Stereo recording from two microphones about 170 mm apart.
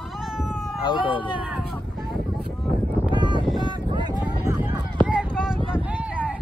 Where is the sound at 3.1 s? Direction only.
25° right (ahead or behind).